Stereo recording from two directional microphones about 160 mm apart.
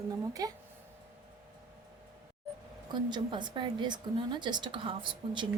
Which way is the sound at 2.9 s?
30° right (ahead or behind).